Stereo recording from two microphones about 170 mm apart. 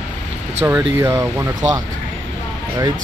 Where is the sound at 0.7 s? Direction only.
15° right (ahead or behind).